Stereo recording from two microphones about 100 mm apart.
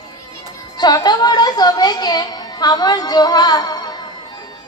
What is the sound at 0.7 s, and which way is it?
A woman's voice, 45° left (ahead or behind).